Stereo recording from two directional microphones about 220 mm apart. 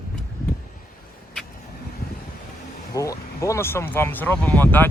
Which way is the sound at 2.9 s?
15° left (ahead or behind).